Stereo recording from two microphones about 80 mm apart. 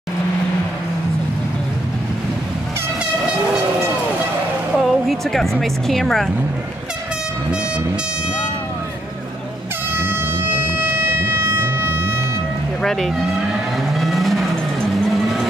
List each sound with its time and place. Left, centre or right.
4.7 s speech: centre
9.9 s civil defense siren: right
12.8 s speech: centre
13.9 s vehicle: centre